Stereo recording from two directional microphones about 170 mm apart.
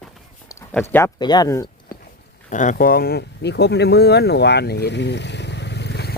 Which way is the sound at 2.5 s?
50° left (ahead or behind).